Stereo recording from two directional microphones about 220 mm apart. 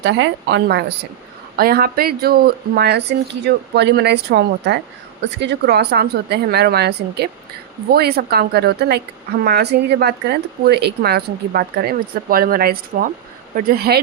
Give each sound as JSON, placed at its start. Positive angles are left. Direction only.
{"t": 0.0, "sound": "speech", "side_deg": -55}